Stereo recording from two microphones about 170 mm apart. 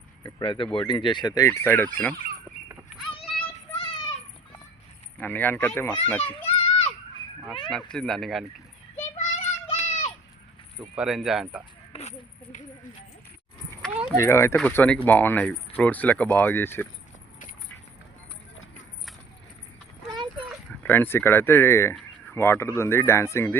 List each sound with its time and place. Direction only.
0.2 s speech: 25° left (ahead or behind)
1.3 s speech: 15° left (ahead or behind)
3.1 s child singing: 30° left (ahead or behind)
5.2 s speech: 10° left (ahead or behind)
7.9 s speech: centre (ahead or behind)
9.1 s child singing: 40° left (ahead or behind)
10.8 s speech: centre (ahead or behind)
11.9 s speech: 45° left (ahead or behind)
13.9 s speech: 5° right (ahead or behind)
14.2 s speech: 15° left (ahead or behind)
20.8 s speech: 10° left (ahead or behind)